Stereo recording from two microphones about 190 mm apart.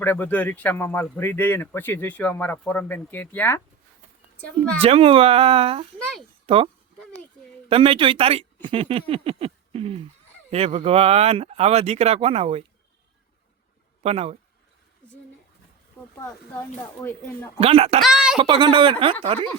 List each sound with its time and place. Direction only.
0.0 s speech: 10° left (ahead or behind)
4.8 s speech: 30° right (ahead or behind)
6.4 s a sound: 30° right (ahead or behind)
7.7 s speech: 30° right (ahead or behind)
14.0 s speech: 35° right (ahead or behind)
16.1 s speech: 15° left (ahead or behind)
17.6 s speech: 30° right (ahead or behind)
18.0 s speech: centre (ahead or behind)
18.3 s speech: 25° right (ahead or behind)